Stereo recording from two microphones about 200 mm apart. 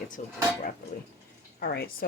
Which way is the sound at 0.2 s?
40° left (ahead or behind).